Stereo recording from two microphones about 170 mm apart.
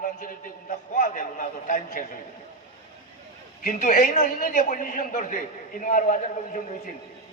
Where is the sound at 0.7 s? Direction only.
50° left (ahead or behind).